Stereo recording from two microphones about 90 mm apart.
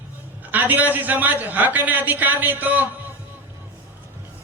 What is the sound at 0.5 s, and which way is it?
A man's voice, 20° right (ahead or behind).